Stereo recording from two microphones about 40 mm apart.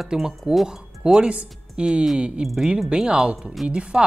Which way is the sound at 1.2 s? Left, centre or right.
Right.